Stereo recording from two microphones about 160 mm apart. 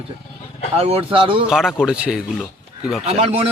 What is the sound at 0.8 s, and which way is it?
Speech, 40° right (ahead or behind).